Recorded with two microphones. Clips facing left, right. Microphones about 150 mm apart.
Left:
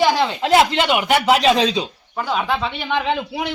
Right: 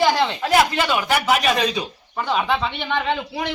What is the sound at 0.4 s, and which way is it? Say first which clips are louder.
A man's voice: left 4 dB; 20° left (ahead or behind).